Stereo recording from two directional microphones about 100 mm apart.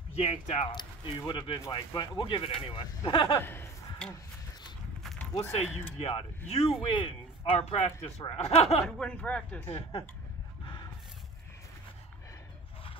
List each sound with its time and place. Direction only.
0.1 s speech: 90° left
0.7 s speech: 50° left (ahead or behind)
3.3 s speech: 25° left (ahead or behind)
5.0 s a sound: centre (ahead or behind)
5.5 s speech: 85° left; by 7.5 s 55° left (ahead or behind)
7.5 s speech: 90° left
9.0 s speech: 10° left (ahead or behind)
9.7 s speech: 75° left (ahead or behind)